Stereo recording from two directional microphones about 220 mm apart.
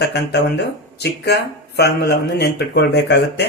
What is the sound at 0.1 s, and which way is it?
Speech, 50° left (ahead or behind).